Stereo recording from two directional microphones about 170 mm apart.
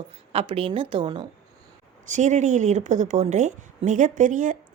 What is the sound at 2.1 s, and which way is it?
Speech, 45° right (ahead or behind).